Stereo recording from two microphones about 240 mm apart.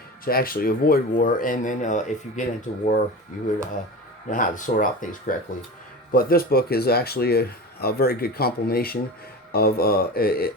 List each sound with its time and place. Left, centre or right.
0.3 s speech: left
4.3 s speech: left